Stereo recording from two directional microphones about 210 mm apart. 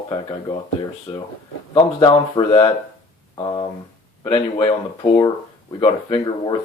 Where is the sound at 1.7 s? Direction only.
25° left (ahead or behind).